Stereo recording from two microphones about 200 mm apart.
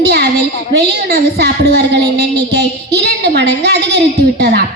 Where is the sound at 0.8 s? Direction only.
55° right (ahead or behind).